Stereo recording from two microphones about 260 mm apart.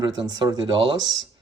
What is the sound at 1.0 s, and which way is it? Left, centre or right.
Speech, right.